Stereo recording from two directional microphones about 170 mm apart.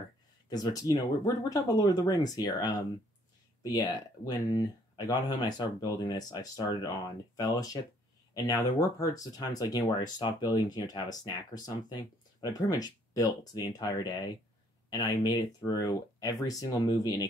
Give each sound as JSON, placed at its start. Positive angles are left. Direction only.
{"t": 0.5, "sound": "speech", "side_deg": 20}